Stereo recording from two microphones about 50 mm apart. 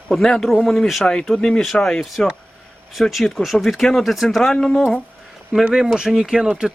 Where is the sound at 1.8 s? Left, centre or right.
Centre.